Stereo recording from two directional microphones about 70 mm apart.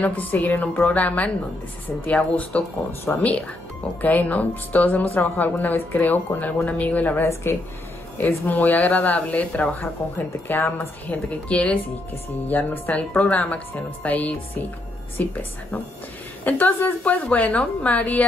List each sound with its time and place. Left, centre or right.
0.0 s a woman's voice: left
7.5 s a woman's voice: left
10.5 s a woman's voice: left
11.1 s a woman's voice: centre